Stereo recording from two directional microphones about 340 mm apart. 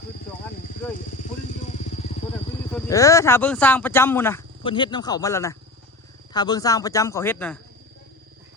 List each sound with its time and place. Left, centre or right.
0.9 s vehicle: left
2.7 s speech: centre